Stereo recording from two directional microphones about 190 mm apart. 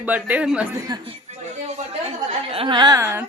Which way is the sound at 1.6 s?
35° right (ahead or behind).